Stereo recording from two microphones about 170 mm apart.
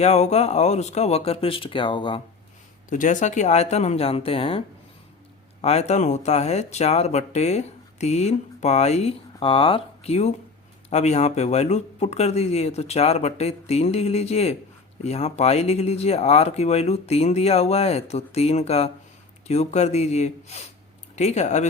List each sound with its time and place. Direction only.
0.0 s speech: 40° left (ahead or behind)
2.9 s speech: 45° left (ahead or behind)
5.6 s speech: 40° left (ahead or behind)